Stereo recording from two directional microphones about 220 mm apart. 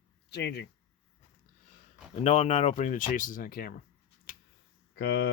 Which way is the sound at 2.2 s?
25° left (ahead or behind).